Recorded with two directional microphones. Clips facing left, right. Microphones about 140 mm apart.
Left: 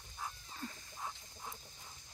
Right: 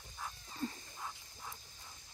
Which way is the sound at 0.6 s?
30° right (ahead or behind).